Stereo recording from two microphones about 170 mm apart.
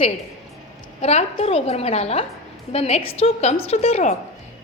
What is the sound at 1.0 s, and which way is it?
A woman's voice, 40° left (ahead or behind).